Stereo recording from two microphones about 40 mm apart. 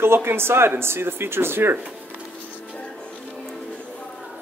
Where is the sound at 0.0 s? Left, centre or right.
Right.